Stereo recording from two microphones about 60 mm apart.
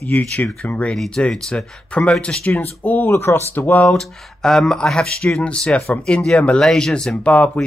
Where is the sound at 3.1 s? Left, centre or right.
Left.